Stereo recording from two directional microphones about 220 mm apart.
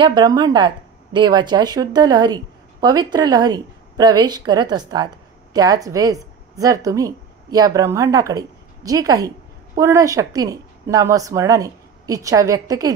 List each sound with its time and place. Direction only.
0.0 s a woman's voice: 20° right (ahead or behind)